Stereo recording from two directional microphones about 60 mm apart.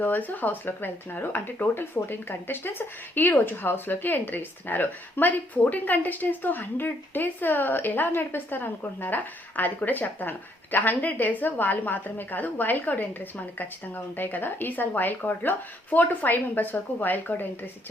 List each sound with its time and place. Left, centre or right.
0.0 s speech: left